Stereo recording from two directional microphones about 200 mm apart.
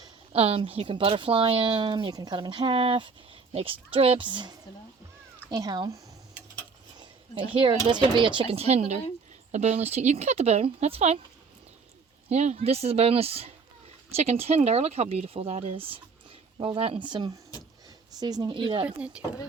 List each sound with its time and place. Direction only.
0.0 s a woman's voice: 30° right (ahead or behind)
6.9 s a sound: 25° right (ahead or behind)
7.9 s a woman's voice: 25° right (ahead or behind)
12.3 s a woman's voice: 35° right (ahead or behind)
18.9 s speech: 5° right (ahead or behind)